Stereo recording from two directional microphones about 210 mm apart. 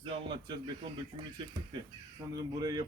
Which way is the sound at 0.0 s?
20° right (ahead or behind).